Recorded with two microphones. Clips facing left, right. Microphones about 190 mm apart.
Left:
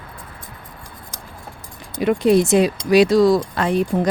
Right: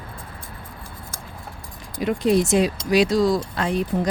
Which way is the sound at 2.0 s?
65° left (ahead or behind).